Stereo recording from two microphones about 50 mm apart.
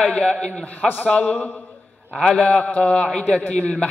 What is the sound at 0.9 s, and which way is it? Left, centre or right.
Speech, left.